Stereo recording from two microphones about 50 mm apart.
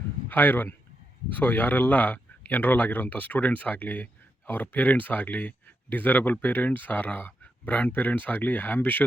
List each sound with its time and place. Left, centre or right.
0.3 s speech: left